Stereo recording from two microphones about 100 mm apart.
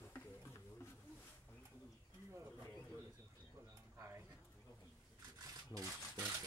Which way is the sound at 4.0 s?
30° right (ahead or behind).